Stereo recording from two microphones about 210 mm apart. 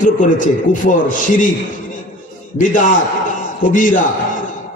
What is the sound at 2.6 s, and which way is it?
A man's voice, 40° left (ahead or behind).